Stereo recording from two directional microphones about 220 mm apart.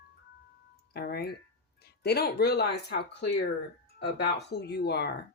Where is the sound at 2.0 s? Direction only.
45° left (ahead or behind).